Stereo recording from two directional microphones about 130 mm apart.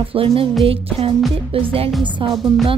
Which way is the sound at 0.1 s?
45° right (ahead or behind).